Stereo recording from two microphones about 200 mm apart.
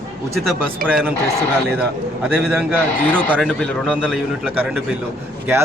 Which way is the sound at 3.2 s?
5° left (ahead or behind).